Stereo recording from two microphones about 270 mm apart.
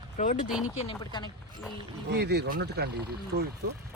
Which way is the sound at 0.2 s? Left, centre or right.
Left.